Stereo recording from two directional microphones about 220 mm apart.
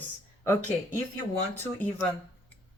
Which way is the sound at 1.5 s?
10° left (ahead or behind).